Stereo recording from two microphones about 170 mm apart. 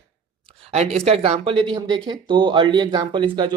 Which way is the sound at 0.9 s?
35° right (ahead or behind).